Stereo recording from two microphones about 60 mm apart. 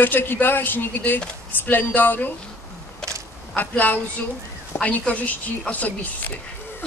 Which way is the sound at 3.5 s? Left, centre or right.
Left.